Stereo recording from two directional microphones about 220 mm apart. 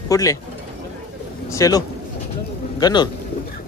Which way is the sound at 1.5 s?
15° left (ahead or behind).